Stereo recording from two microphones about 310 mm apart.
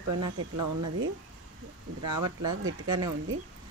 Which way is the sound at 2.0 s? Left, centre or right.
Right.